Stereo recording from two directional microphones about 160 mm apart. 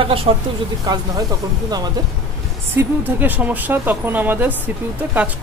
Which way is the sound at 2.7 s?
10° right (ahead or behind).